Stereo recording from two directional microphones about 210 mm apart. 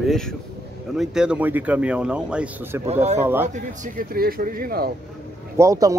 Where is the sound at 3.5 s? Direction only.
40° right (ahead or behind).